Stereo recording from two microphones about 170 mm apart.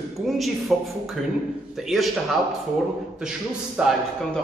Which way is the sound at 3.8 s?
5° right (ahead or behind).